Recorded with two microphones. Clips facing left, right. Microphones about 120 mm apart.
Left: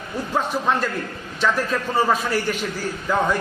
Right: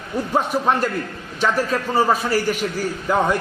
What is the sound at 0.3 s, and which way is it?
A man's voice, 15° right (ahead or behind).